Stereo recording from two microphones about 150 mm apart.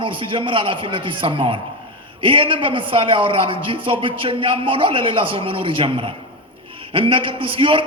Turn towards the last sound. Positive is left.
turn(degrees=-35)  # may be behind; listen again after turning